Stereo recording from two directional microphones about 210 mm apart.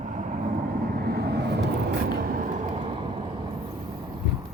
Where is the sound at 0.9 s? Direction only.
45° right (ahead or behind).